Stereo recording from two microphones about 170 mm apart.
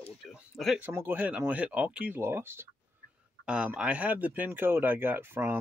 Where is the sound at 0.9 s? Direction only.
10° right (ahead or behind).